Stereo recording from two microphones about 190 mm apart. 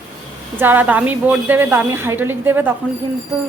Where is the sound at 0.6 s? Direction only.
10° right (ahead or behind).